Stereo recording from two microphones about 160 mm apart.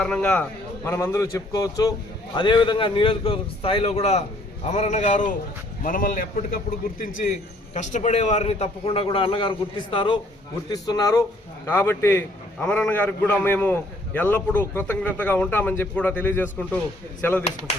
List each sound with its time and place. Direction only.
0.0 s a man's voice: 5° left (ahead or behind)